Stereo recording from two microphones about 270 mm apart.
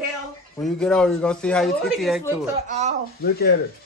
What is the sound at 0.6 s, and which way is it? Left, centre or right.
A man's voice, centre.